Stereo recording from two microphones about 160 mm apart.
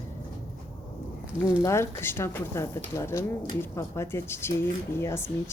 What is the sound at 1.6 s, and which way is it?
Speech, 15° left (ahead or behind).